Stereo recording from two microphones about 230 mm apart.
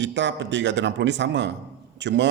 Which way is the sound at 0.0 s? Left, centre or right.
Right.